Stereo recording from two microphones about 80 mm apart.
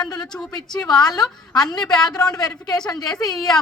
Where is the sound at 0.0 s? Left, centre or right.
Left.